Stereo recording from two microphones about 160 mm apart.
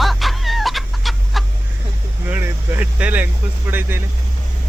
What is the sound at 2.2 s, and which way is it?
Speech, 10° right (ahead or behind).